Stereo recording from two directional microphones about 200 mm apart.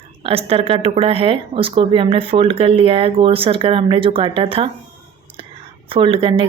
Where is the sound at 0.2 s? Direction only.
30° right (ahead or behind).